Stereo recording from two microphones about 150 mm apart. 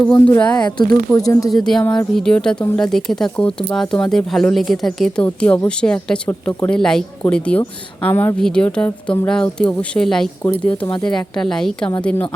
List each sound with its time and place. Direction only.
0.0 s a woman's voice: 10° left (ahead or behind)
1.1 s speech: 20° left (ahead or behind)
1.6 s a woman's voice: 5° left (ahead or behind)
10.8 s speech: 30° left (ahead or behind)
11.1 s a woman's voice: 5° left (ahead or behind)